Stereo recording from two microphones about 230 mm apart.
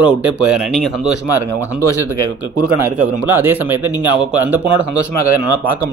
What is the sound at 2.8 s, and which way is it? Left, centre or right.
Speech, centre.